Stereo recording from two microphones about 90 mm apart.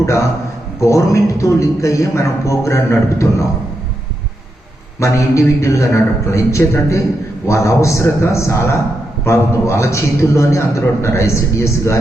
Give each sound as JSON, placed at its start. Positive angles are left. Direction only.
{"t": 0.0, "sound": "a man's voice", "side_deg": 35}
{"t": 4.9, "sound": "a man's voice", "side_deg": 35}